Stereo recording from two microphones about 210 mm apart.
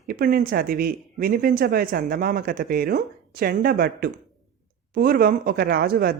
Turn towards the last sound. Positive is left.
turn(degrees=-45)  # may be behind; listen again after turning